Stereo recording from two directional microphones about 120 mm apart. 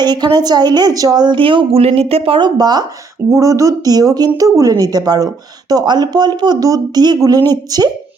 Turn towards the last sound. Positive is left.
turn(degrees=-35)  # may be behind; listen again after turning